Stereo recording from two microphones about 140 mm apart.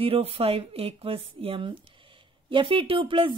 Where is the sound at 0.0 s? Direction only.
45° right (ahead or behind).